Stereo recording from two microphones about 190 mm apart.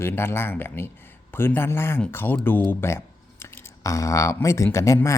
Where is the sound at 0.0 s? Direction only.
15° left (ahead or behind).